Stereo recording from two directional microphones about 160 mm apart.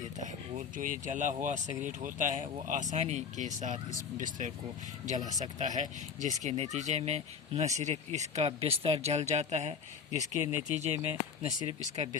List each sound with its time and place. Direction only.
0.0 s speech: 50° right (ahead or behind)